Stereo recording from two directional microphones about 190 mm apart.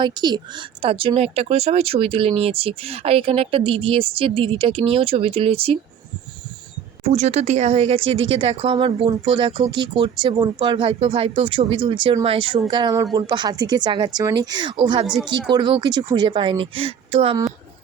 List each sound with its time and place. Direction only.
0.0 s speech: 20° right (ahead or behind)
7.0 s speech: 35° right (ahead or behind)
15.0 s speech: 5° right (ahead or behind)
15.5 s speech: 25° right (ahead or behind)